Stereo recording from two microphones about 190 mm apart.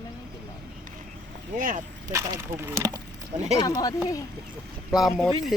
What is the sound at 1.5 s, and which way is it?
Speech, 45° right (ahead or behind).